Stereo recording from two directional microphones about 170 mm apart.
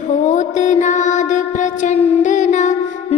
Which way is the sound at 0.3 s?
45° left (ahead or behind).